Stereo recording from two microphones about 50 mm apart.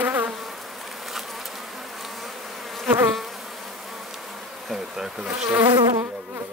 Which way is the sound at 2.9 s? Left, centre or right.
Right.